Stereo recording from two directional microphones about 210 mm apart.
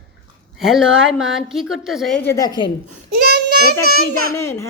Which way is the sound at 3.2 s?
50° right (ahead or behind).